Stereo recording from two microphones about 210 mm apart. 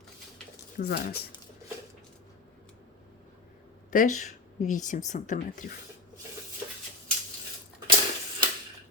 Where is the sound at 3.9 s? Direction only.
40° left (ahead or behind).